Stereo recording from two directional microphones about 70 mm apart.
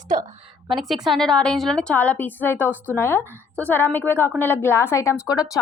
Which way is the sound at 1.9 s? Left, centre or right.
Left.